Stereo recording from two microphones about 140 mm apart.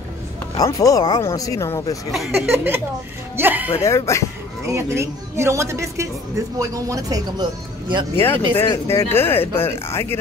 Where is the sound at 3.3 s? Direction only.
15° right (ahead or behind).